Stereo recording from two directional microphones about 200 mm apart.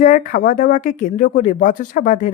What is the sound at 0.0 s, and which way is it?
A woman's voice, 40° left (ahead or behind).